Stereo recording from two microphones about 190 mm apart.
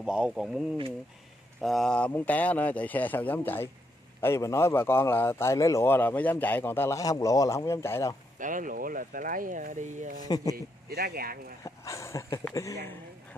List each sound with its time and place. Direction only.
0.0 s a man's voice: 5° right (ahead or behind); by 8.1 s 15° left (ahead or behind)
8.4 s speech: 45° right (ahead or behind)
10.2 s speech: 20° left (ahead or behind)
10.5 s speech: 55° right (ahead or behind)
11.6 s a man's voice: 15° left (ahead or behind)